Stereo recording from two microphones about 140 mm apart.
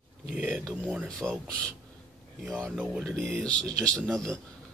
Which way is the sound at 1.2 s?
20° right (ahead or behind).